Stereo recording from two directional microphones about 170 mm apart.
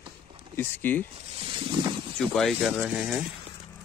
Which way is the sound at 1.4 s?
30° right (ahead or behind).